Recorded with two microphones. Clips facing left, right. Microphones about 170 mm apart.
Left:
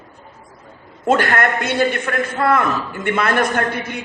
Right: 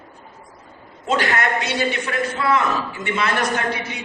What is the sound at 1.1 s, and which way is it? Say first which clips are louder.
A man's voice: left 4 dB; 50° left (ahead or behind).